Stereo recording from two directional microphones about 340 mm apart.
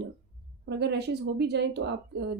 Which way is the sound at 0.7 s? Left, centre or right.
Right.